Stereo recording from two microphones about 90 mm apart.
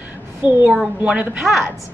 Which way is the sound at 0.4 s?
15° right (ahead or behind).